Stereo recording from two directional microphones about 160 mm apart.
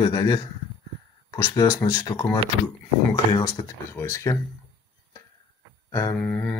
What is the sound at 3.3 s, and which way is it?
Speech, 20° left (ahead or behind).